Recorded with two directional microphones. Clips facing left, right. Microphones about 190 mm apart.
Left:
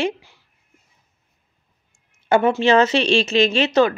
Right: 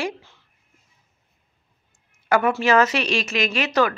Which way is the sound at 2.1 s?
25° left (ahead or behind).